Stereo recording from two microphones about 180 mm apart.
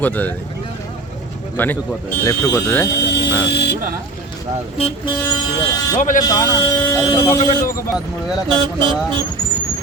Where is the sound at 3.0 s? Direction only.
75° left (ahead or behind).